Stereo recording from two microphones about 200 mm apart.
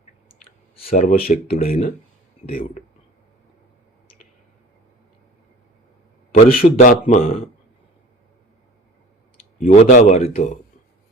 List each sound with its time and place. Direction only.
0.9 s a man's voice: 40° left (ahead or behind)
6.3 s a man's voice: 45° left (ahead or behind)
9.6 s a man's voice: 30° left (ahead or behind)